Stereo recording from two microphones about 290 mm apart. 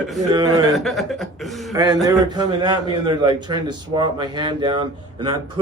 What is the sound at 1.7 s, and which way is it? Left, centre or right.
A man's voice, centre.